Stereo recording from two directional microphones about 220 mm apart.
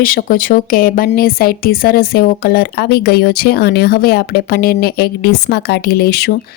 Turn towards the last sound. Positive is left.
turn(degrees=45)  # may be behind; listen again after turning